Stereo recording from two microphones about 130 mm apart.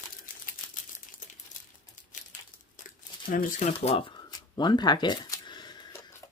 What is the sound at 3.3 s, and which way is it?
Speech, 70° left (ahead or behind).